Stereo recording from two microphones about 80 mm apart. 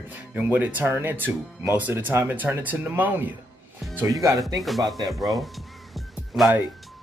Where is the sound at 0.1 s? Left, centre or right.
Right.